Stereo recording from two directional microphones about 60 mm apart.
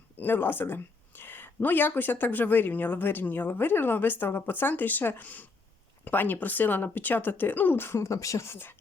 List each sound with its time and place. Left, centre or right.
0.2 s speech: left